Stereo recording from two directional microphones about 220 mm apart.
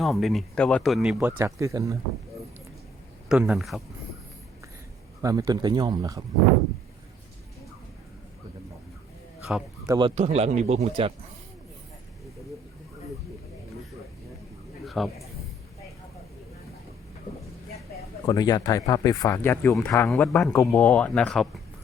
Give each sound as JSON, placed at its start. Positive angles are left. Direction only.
{"t": 0.0, "sound": "speech", "side_deg": 0}
{"t": 3.2, "sound": "speech", "side_deg": -5}
{"t": 5.2, "sound": "speech", "side_deg": -15}
{"t": 9.8, "sound": "speech", "side_deg": -15}
{"t": 10.2, "sound": "a man's voice", "side_deg": -30}
{"t": 14.8, "sound": "a sound", "side_deg": 0}
{"t": 18.3, "sound": "speech", "side_deg": 15}